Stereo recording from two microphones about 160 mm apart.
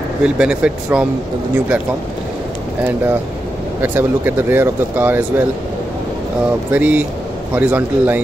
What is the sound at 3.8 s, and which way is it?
Speech, 15° right (ahead or behind).